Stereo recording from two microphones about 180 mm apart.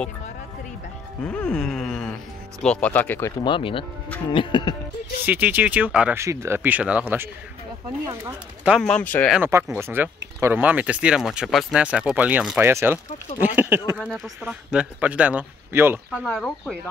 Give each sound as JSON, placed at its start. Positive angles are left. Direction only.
{"t": 1.2, "sound": "a sound", "side_deg": 5}
{"t": 2.6, "sound": "speech", "side_deg": 5}
{"t": 3.4, "sound": "music", "side_deg": 30}
{"t": 5.2, "sound": "speech", "side_deg": -10}
{"t": 8.7, "sound": "speech", "side_deg": 5}
{"t": 9.3, "sound": "speech", "side_deg": -10}
{"t": 16.3, "sound": "speech", "side_deg": 5}